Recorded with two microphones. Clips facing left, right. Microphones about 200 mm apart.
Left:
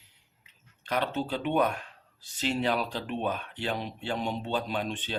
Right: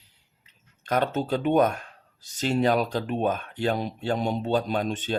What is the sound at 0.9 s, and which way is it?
Speech, 45° right (ahead or behind).